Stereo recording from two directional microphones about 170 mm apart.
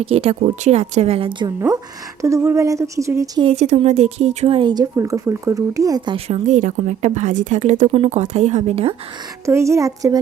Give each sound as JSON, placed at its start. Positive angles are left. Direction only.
{"t": 0.1, "sound": "a woman's voice", "side_deg": -40}
{"t": 3.4, "sound": "speech", "side_deg": -40}
{"t": 6.1, "sound": "speech", "side_deg": -35}
{"t": 9.5, "sound": "speech", "side_deg": -15}